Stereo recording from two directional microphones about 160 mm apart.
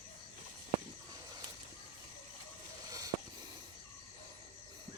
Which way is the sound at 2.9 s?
20° right (ahead or behind).